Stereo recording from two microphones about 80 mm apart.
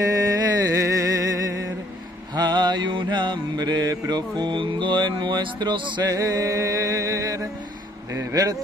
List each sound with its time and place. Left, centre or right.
0.0 s music: right
2.3 s mantra: right
6.0 s music: right